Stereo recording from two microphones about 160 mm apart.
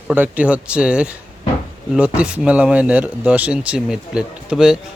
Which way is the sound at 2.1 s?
5° right (ahead or behind).